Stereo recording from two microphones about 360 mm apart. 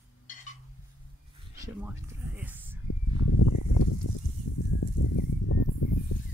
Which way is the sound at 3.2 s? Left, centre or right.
Left.